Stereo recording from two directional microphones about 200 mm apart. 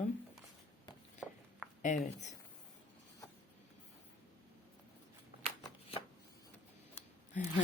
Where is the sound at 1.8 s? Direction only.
40° left (ahead or behind).